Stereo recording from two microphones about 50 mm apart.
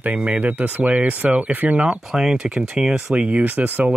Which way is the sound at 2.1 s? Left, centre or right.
Centre.